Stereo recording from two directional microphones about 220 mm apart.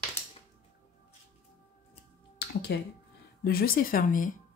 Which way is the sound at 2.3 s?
50° left (ahead or behind).